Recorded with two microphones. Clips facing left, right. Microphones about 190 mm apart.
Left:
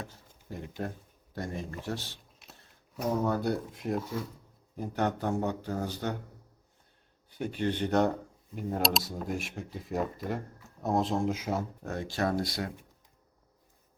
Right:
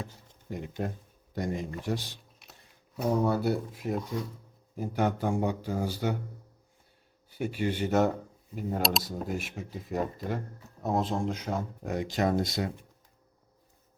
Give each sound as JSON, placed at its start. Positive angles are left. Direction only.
{"t": 0.5, "sound": "speech", "side_deg": -15}
{"t": 3.2, "sound": "speech", "side_deg": -10}
{"t": 7.3, "sound": "speech", "side_deg": -5}
{"t": 11.8, "sound": "speech", "side_deg": -15}